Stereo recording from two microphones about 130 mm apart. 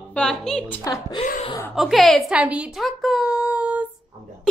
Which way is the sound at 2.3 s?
10° right (ahead or behind).